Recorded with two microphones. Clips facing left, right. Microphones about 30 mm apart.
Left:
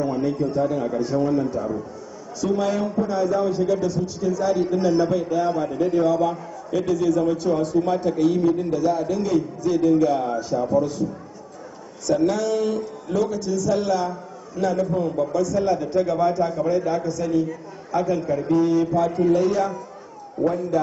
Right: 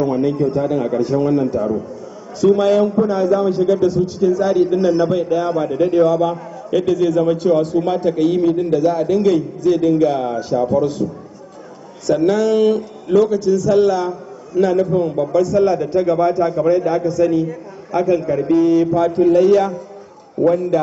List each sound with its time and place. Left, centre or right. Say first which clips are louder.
0.4 s a man's voice: right 5 dB; right
6.7 s a man's voice: right 5 dB; right
12.1 s a man's voice: right 6 dB; right
13.2 s a man's voice: right 7 dB; right
18.5 s a man's voice: right 6 dB; right
19.2 s a man's voice: right 9 dB; right
20.4 s a man's voice: right 7 dB; right